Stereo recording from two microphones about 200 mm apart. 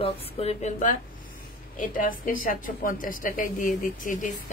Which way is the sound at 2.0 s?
45° left (ahead or behind).